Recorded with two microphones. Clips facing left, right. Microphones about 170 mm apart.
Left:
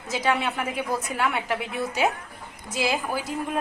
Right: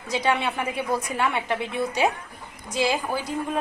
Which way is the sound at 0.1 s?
5° left (ahead or behind).